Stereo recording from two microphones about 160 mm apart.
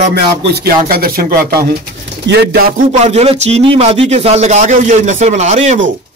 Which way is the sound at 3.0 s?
40° right (ahead or behind).